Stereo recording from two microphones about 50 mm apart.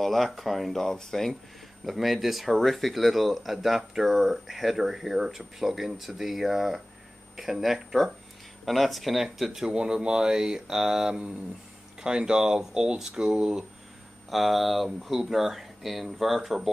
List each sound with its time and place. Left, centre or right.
0.0 s speech: centre
1.9 s speech: centre
14.3 s speech: centre